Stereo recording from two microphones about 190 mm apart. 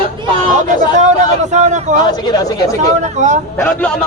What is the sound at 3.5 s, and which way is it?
Speech, 10° left (ahead or behind).